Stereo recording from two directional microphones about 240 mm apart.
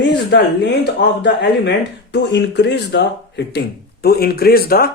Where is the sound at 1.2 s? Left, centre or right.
Left.